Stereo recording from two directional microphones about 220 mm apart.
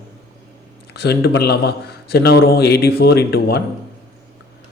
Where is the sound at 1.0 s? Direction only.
50° left (ahead or behind).